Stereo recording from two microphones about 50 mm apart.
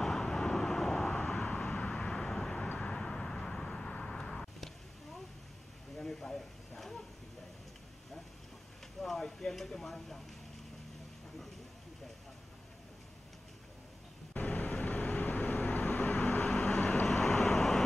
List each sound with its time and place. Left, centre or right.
0.0 s vehicle: centre
5.9 s a sound: centre
9.0 s a sound: centre
14.3 s vehicle: left
16.4 s vehicle: centre
17.0 s vehicle: centre